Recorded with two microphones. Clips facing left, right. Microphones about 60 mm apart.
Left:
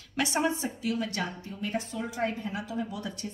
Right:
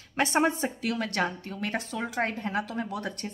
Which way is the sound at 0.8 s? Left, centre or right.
Right.